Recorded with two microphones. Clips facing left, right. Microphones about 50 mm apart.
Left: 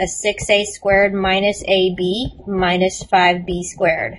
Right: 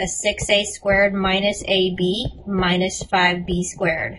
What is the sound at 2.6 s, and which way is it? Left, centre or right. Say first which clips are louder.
A woman's voice: left 4 dB; left.